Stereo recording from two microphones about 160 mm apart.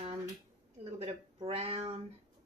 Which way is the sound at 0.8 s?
40° right (ahead or behind).